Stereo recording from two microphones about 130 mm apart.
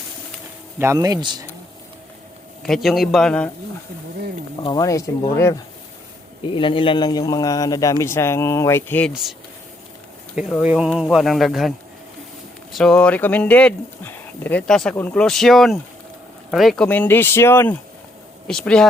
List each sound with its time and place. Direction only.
0.8 s speech: 25° right (ahead or behind)
2.6 s a man's voice: centre (ahead or behind)
4.6 s a man's voice: 30° left (ahead or behind)
6.4 s a man's voice: 40° left (ahead or behind); by 9.1 s 15° left (ahead or behind)
10.6 s a man's voice: 10° right (ahead or behind)
12.7 s a man's voice: 5° left (ahead or behind)
18.4 s speech: 5° left (ahead or behind)